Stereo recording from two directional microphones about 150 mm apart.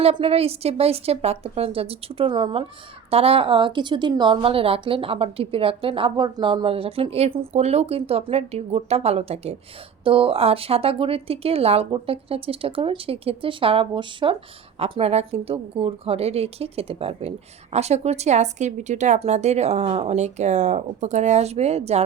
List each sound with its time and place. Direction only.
0.0 s a woman's voice: 40° right (ahead or behind)